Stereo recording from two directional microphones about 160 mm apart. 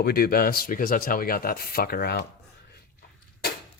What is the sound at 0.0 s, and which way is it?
Speech, 70° left (ahead or behind).